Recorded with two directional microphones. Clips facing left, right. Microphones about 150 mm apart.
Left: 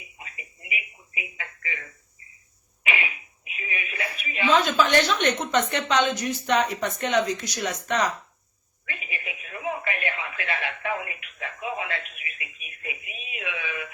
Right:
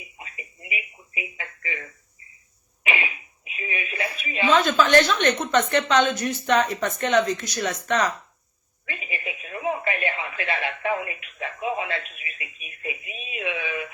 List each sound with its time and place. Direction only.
0.2 s telephone: 25° right (ahead or behind)
3.4 s a sound: 30° right (ahead or behind)
4.8 s a woman's voice: 15° left (ahead or behind)
8.9 s radio: 25° right (ahead or behind)